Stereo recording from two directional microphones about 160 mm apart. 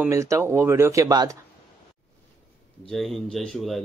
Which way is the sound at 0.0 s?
20° right (ahead or behind).